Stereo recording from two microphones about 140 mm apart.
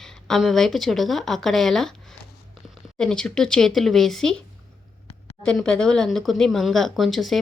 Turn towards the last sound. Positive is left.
turn(degrees=0)  # may be behind; listen again after turning